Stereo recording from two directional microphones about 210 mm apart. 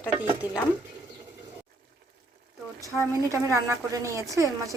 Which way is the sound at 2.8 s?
15° right (ahead or behind).